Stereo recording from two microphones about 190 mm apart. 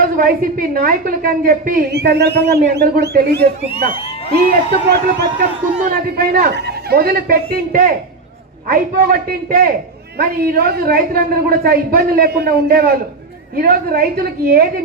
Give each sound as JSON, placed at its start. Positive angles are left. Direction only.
{"t": 0.0, "sound": "a man's voice", "side_deg": -45}